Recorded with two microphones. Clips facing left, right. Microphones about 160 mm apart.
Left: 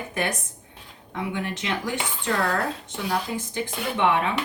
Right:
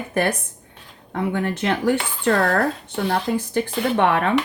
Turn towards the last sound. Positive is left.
turn(degrees=-60)  # may be behind; listen again after turning